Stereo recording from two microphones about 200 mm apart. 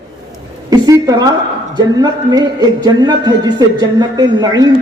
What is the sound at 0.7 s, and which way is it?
A woman's voice, 20° right (ahead or behind).